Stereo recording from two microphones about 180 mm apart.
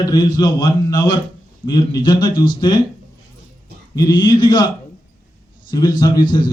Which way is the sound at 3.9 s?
20° left (ahead or behind).